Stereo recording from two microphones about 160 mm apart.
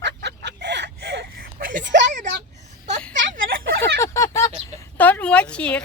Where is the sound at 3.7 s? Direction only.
20° left (ahead or behind).